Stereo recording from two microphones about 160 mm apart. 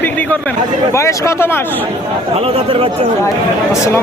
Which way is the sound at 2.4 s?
35° right (ahead or behind).